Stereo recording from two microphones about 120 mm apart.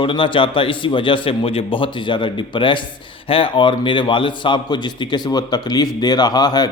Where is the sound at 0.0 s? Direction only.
45° left (ahead or behind).